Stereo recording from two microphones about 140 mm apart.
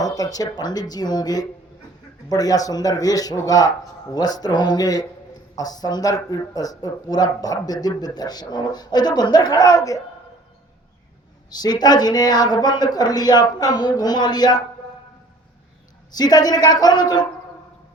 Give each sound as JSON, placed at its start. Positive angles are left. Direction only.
{"t": 0.0, "sound": "a sound", "side_deg": 25}
{"t": 0.5, "sound": "speech", "side_deg": 30}
{"t": 11.5, "sound": "speech", "side_deg": 30}
{"t": 16.1, "sound": "speech", "side_deg": 30}